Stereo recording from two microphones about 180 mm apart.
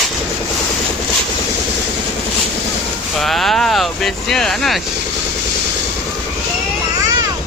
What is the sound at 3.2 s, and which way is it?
Speech, centre (ahead or behind).